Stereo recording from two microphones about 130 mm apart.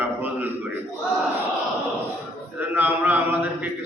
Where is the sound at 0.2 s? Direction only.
15° right (ahead or behind).